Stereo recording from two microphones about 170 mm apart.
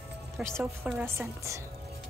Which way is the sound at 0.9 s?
15° right (ahead or behind).